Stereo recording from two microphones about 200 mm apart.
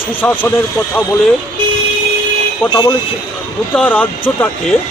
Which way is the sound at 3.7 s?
5° left (ahead or behind).